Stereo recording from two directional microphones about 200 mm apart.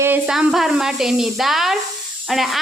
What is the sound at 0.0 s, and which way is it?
Speech, 5° right (ahead or behind).